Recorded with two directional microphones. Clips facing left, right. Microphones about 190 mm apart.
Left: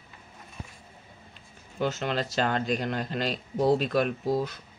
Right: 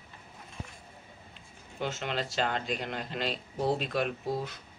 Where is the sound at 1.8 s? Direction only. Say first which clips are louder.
Left 5 dB; 40° left (ahead or behind).